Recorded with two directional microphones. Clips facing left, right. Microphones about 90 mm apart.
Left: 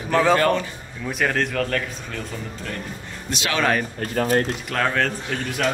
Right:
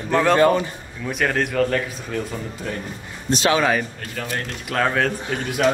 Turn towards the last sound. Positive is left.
turn(degrees=-10)  # may be behind; listen again after turning